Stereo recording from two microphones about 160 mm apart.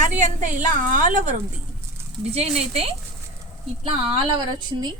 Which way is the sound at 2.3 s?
40° right (ahead or behind).